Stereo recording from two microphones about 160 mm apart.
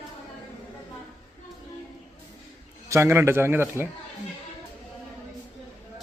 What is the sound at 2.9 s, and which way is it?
A man's voice, 15° right (ahead or behind).